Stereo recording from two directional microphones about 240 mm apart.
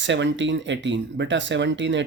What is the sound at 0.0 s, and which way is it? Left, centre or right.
Speech, right.